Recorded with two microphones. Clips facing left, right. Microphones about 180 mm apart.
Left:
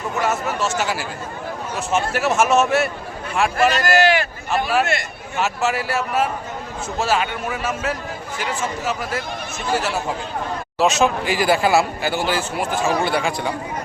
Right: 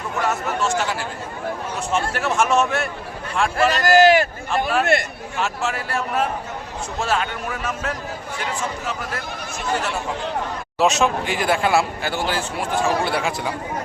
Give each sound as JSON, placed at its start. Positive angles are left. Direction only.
{"t": 0.2, "sound": "speech", "side_deg": 0}
{"t": 4.0, "sound": "speech", "side_deg": -45}
{"t": 5.4, "sound": "speech", "side_deg": 5}